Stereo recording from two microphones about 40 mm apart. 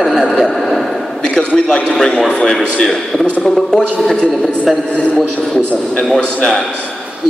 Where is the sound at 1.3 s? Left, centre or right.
Left.